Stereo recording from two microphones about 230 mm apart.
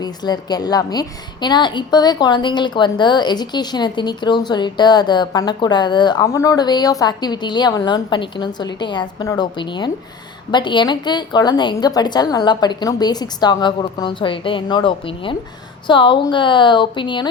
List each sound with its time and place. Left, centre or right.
0.0 s a woman's voice: centre